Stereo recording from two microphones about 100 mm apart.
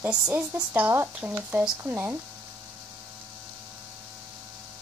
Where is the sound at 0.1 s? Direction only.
20° right (ahead or behind).